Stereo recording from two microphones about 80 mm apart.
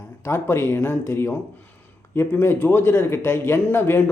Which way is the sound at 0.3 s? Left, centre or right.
Left.